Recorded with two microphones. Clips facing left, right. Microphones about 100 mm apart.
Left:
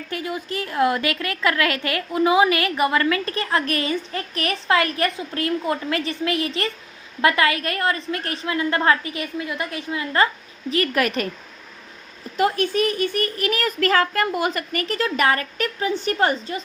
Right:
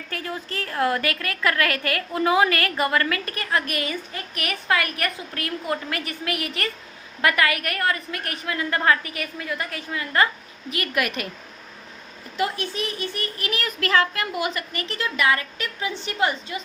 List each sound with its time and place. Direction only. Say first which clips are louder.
0.1 s a woman's voice: left 4 dB; 15° left (ahead or behind)
10.7 s a woman's voice: left 5 dB; 35° left (ahead or behind)
12.4 s a child's voice: left 6 dB; 50° left (ahead or behind)